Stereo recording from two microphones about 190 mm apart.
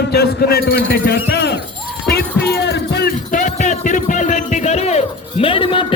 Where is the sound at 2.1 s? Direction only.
60° left (ahead or behind).